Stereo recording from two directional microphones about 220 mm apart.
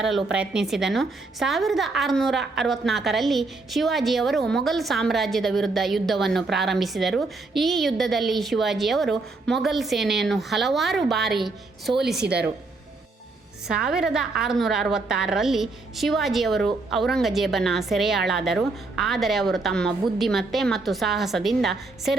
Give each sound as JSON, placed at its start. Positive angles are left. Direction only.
{"t": 0.0, "sound": "a woman's voice", "side_deg": 0}
{"t": 12.1, "sound": "speech", "side_deg": -45}
{"t": 13.7, "sound": "a woman's voice", "side_deg": -5}